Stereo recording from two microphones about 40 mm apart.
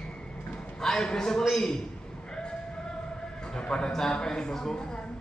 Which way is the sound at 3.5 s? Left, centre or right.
Left.